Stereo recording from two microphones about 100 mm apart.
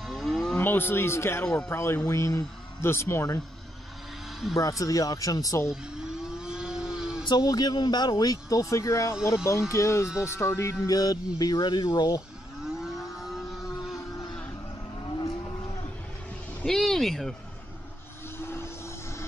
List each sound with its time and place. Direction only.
0.0 s a sound: centre (ahead or behind)
0.6 s speech: 20° left (ahead or behind)
4.6 s speech: 35° left (ahead or behind)
5.7 s a sound: 5° right (ahead or behind)
7.2 s speech: 45° left (ahead or behind)
11.6 s speech: 55° left (ahead or behind)
12.6 s vehicle: centre (ahead or behind)
13.9 s a sound: 35° left (ahead or behind)
15.0 s vehicle: 45° left (ahead or behind)
16.6 s speech: 5° left (ahead or behind)
18.4 s vehicle: 25° left (ahead or behind)